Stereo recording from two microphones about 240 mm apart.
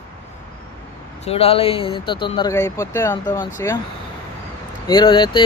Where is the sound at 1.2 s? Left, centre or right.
Left.